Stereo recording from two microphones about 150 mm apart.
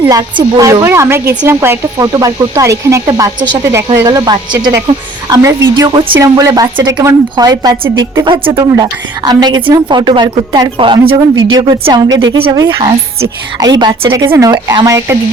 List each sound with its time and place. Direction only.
0.0 s a woman's voice: 25° right (ahead or behind)